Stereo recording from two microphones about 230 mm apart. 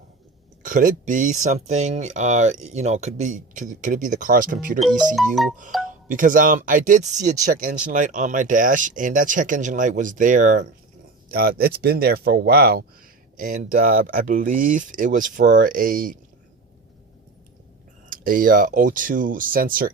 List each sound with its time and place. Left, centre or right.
0.6 s speech: right
4.8 s speech: centre
5.7 s music: centre
6.1 s speech: right
18.1 s speech: right